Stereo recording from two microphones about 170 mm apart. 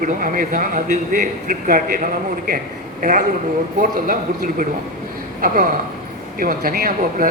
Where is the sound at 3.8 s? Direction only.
55° right (ahead or behind).